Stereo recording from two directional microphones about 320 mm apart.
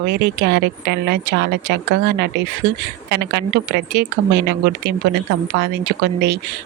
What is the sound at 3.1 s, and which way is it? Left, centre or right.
Speech, right.